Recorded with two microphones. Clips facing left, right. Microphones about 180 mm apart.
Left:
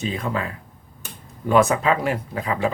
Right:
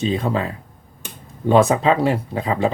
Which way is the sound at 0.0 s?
30° right (ahead or behind).